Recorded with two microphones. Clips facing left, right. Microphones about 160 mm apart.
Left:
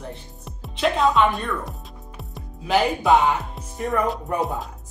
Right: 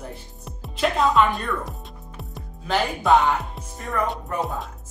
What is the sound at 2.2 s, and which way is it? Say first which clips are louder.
Speech: left 1 dB; centre (ahead or behind).